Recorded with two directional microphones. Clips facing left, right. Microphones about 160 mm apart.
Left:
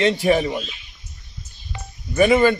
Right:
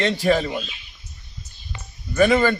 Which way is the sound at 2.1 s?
15° left (ahead or behind).